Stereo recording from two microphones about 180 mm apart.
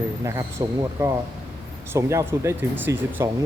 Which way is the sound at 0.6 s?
20° right (ahead or behind).